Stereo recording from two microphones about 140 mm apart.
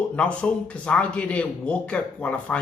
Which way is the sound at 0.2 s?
5° left (ahead or behind).